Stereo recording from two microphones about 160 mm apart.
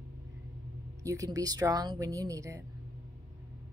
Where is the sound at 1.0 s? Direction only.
20° right (ahead or behind).